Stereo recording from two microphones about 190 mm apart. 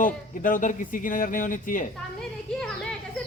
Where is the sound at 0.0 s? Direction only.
45° left (ahead or behind).